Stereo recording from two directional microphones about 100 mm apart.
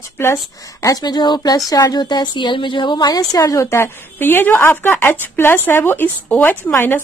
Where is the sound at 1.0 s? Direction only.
45° left (ahead or behind).